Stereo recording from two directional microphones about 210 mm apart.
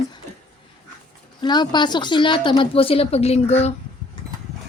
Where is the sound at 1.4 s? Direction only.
20° left (ahead or behind).